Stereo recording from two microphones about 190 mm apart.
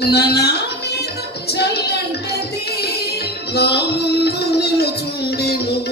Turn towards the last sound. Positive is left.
turn(degrees=55)  # may be behind; listen again after turning